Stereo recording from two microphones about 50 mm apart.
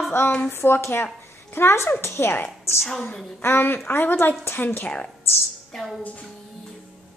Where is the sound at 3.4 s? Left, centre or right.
Left.